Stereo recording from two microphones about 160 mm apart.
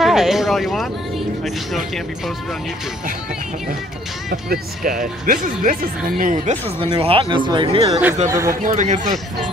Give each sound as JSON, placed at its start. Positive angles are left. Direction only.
{"t": 0.0, "sound": "speech", "side_deg": 0}
{"t": 4.3, "sound": "speech", "side_deg": -65}
{"t": 6.8, "sound": "speech", "side_deg": -35}
{"t": 8.3, "sound": "speech", "side_deg": -20}
{"t": 8.6, "sound": "speech", "side_deg": -50}